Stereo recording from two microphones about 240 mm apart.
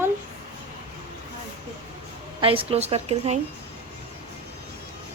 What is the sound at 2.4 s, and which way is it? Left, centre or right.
Speech, right.